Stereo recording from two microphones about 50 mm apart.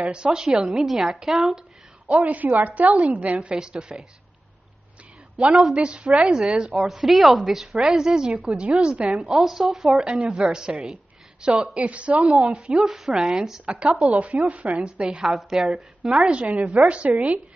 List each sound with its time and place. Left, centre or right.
0.1 s a woman's voice: centre
2.0 s a woman's voice: right
3.3 s a woman's voice: centre
5.5 s a woman's voice: centre
5.8 s a woman's voice: right
6.2 s a woman's voice: centre
9.3 s a woman's voice: centre; by 12.2 s right
12.5 s a woman's voice: centre
13.7 s a woman's voice: centre
15.2 s a woman's voice: centre
16.2 s a woman's voice: right